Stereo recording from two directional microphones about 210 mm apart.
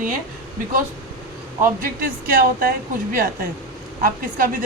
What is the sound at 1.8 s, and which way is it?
A woman's voice, 40° right (ahead or behind).